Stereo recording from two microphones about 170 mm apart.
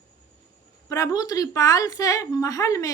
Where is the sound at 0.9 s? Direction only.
20° left (ahead or behind).